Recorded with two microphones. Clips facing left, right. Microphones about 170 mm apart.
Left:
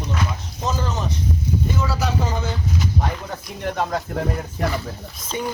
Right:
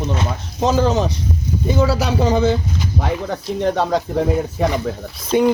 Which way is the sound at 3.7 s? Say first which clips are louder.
Right 2 dB; 75° right (ahead or behind).